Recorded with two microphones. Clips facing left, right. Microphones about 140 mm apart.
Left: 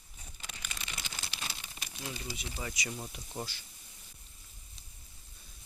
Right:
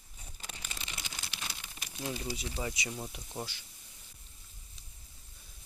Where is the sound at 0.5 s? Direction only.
30° right (ahead or behind).